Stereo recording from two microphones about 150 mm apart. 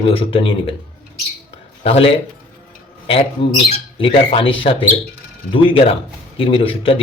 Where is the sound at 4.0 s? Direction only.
40° left (ahead or behind).